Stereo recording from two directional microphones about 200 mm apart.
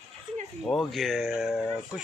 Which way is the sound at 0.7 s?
Centre (ahead or behind).